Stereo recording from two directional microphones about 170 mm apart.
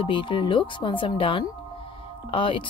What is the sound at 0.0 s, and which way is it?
Speech, 30° left (ahead or behind).